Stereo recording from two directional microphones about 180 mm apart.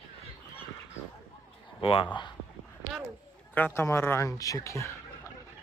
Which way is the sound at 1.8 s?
30° left (ahead or behind).